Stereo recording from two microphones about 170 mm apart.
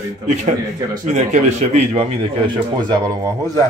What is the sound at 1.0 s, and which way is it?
A man's voice, 45° right (ahead or behind).